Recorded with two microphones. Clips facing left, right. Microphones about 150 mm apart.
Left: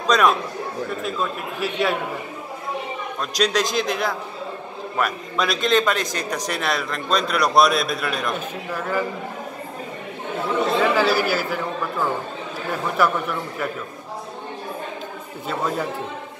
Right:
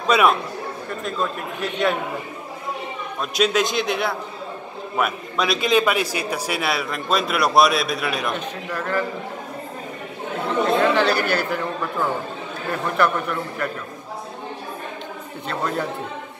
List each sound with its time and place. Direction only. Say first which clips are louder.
0.0 s a man's voice: right 1 dB; 5° right (ahead or behind)
3.2 s a man's voice: right 2 dB; 5° right (ahead or behind)
8.7 s a man's voice: even; 10° left (ahead or behind)
10.6 s speech: right 1 dB; 5° left (ahead or behind)
12.9 s a man's voice: even; 5° left (ahead or behind)